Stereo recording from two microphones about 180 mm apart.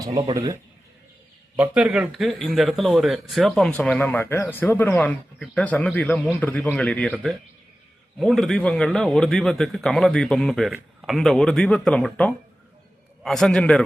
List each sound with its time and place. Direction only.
0.0 s speech: 25° right (ahead or behind)
1.5 s a man's voice: 10° right (ahead or behind)